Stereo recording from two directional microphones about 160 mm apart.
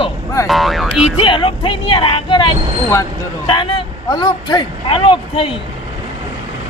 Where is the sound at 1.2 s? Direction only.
30° left (ahead or behind).